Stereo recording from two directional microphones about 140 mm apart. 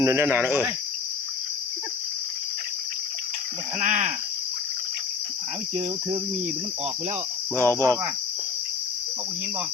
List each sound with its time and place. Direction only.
0.0 s cricket: 20° right (ahead or behind)
3.8 s speech: 60° right (ahead or behind)
7.6 s cricket: 20° left (ahead or behind)